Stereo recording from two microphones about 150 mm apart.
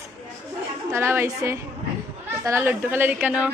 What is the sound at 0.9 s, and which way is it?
A woman's voice, 15° right (ahead or behind).